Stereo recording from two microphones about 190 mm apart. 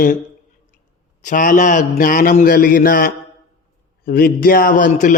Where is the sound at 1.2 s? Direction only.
45° left (ahead or behind).